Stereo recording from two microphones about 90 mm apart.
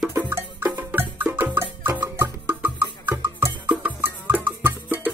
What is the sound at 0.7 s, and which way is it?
Music, 25° right (ahead or behind).